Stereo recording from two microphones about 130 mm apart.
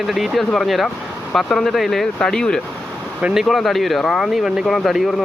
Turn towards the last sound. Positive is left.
turn(degrees=0)  # may be behind; listen again after turning